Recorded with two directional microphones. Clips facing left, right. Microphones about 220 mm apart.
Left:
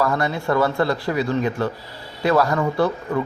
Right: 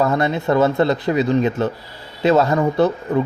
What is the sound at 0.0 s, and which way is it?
Speech, 20° right (ahead or behind).